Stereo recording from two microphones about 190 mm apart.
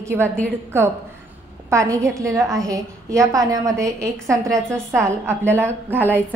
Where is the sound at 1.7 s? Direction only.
15° right (ahead or behind).